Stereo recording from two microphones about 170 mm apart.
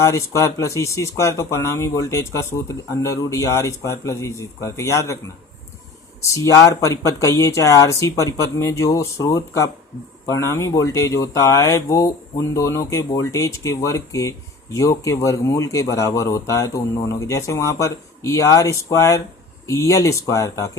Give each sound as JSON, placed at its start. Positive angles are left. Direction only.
{"t": 0.0, "sound": "speech", "side_deg": 15}
{"t": 6.2, "sound": "speech", "side_deg": 20}